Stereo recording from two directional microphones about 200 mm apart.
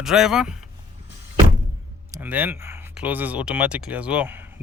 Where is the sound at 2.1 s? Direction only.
10° right (ahead or behind).